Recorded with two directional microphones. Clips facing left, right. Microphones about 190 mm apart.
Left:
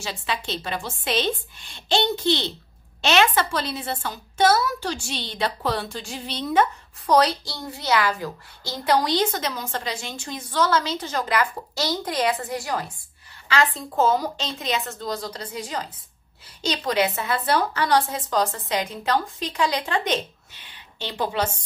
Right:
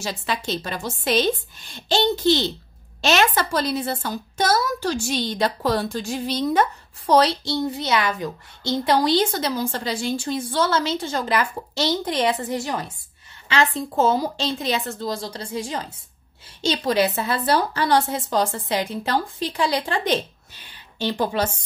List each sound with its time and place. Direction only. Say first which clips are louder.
0.0 s a woman's voice: right 2 dB; 40° right (ahead or behind)
7.1 s a woman's voice: right 2 dB; 25° right (ahead or behind); by 21.5 s 40° right (ahead or behind)